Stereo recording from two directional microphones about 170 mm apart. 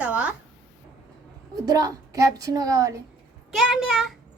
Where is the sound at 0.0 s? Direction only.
10° right (ahead or behind).